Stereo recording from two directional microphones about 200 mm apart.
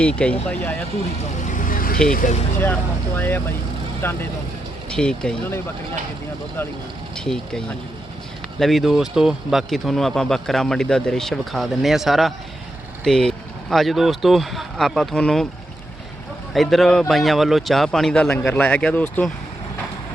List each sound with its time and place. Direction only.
0.0 s speech: 5° left (ahead or behind)
1.5 s vehicle: 40° left (ahead or behind)
2.0 s speech: 45° left (ahead or behind)
3.2 s speech: 10° left (ahead or behind)
7.3 s speech: centre (ahead or behind)
16.5 s speech: centre (ahead or behind)